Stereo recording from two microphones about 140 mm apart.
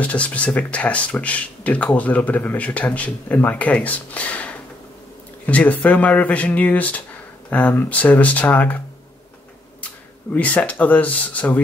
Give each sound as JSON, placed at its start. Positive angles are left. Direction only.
{"t": 0.0, "sound": "speech", "side_deg": 10}
{"t": 10.3, "sound": "speech", "side_deg": 10}